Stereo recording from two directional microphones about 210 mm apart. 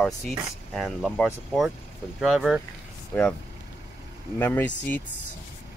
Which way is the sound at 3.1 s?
10° left (ahead or behind).